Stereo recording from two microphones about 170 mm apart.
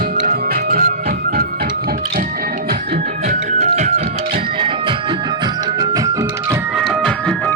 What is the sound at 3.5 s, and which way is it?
Music, 45° right (ahead or behind).